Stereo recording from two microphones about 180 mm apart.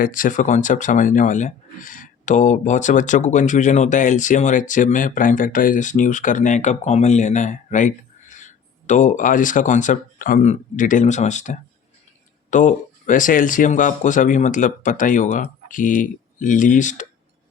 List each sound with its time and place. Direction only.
0.0 s speech: 50° left (ahead or behind)